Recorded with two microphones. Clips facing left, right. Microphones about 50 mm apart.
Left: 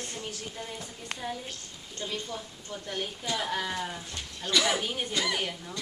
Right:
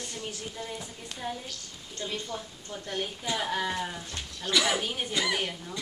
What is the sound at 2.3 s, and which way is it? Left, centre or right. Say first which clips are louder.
Speech: right 1 dB; centre.